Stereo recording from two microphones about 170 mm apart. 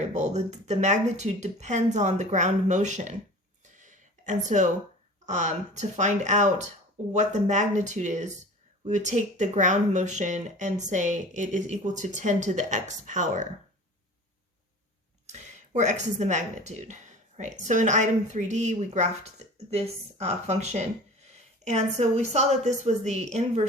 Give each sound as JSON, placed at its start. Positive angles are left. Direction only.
{"t": 0.0, "sound": "speech", "side_deg": -45}
{"t": 3.6, "sound": "a sound", "side_deg": -45}
{"t": 5.2, "sound": "speech", "side_deg": -45}
{"t": 15.3, "sound": "a woman's voice", "side_deg": -45}